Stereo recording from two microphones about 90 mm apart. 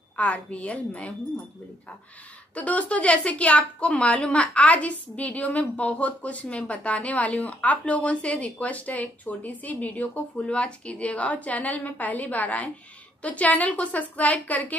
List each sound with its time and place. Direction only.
0.1 s a woman's voice: 10° left (ahead or behind)
2.5 s a woman's voice: 15° left (ahead or behind)